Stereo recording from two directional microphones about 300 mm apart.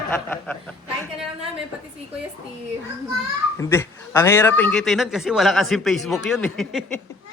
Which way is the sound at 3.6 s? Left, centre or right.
Centre.